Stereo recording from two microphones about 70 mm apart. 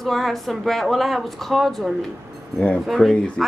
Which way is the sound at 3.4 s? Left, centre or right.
Centre.